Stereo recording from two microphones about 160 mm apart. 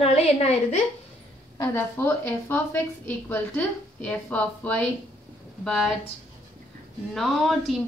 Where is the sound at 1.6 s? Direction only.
15° left (ahead or behind).